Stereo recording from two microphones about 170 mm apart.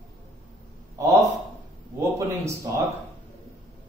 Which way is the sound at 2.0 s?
15° right (ahead or behind).